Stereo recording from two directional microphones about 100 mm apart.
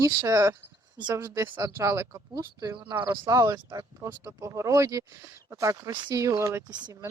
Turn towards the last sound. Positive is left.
turn(degrees=-45)  # may be behind; listen again after turning